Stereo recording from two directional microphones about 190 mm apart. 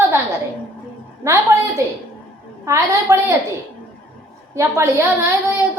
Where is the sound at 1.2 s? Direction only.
15° right (ahead or behind).